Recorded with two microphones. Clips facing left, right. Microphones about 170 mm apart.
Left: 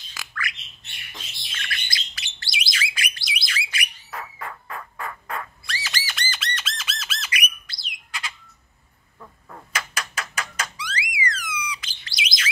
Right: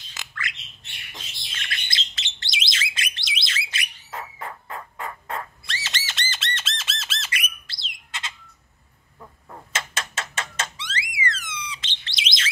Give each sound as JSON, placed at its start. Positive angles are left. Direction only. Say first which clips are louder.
{"t": 0.1, "sound": "squawk", "louder": "left 2 dB", "side_deg": -25}
{"t": 1.6, "sound": "bird", "louder": "even", "side_deg": -25}
{"t": 9.7, "sound": "a sound", "louder": "even", "side_deg": -25}